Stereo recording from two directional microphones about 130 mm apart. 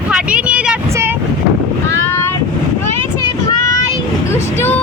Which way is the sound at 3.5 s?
25° left (ahead or behind).